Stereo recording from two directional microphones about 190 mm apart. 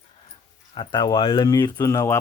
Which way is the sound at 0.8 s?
25° left (ahead or behind).